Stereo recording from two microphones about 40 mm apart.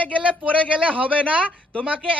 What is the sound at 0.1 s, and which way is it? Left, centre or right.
A woman's voice, right.